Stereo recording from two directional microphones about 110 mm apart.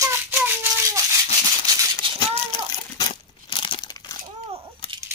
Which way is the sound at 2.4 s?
45° left (ahead or behind).